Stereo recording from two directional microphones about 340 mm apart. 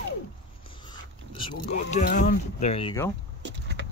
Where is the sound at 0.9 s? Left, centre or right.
Centre.